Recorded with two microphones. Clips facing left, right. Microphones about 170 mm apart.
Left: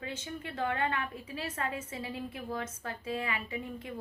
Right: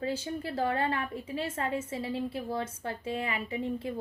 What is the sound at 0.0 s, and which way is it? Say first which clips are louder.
A woman's voice: right 7 dB; 35° right (ahead or behind).